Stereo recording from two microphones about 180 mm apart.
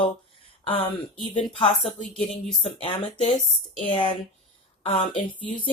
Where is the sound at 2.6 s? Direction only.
30° left (ahead or behind).